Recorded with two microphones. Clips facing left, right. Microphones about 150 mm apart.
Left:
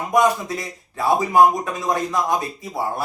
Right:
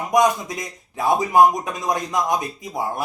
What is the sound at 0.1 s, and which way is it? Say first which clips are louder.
A man's voice: even; 20° right (ahead or behind).